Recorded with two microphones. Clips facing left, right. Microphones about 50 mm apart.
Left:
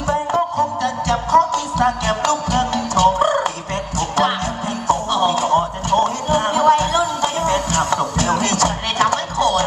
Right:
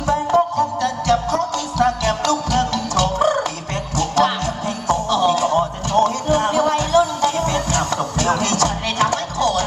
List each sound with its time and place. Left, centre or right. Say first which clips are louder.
0.8 s music: right 1 dB; left
4.9 s a sound: even; left
8.4 s music: left 1 dB; left